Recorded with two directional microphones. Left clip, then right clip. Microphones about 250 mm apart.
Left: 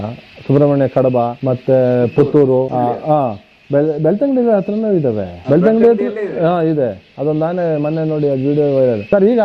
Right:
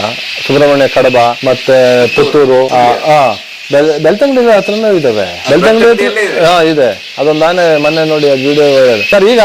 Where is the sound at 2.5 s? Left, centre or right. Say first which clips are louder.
Right 8 dB; right.